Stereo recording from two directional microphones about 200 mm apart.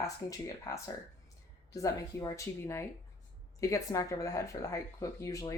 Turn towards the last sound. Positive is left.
turn(degrees=15)  # may be behind; listen again after turning